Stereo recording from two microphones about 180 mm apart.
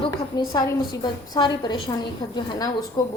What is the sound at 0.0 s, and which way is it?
A woman's voice, 20° left (ahead or behind).